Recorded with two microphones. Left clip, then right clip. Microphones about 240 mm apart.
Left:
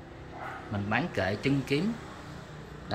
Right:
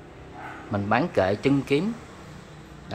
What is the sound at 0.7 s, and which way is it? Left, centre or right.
Speech, right.